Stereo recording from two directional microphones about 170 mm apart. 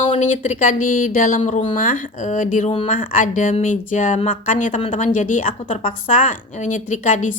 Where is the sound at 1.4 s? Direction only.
40° left (ahead or behind).